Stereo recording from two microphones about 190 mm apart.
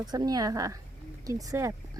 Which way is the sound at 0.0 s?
20° right (ahead or behind).